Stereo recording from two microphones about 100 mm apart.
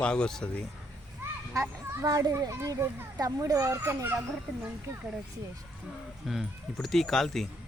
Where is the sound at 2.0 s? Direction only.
35° right (ahead or behind).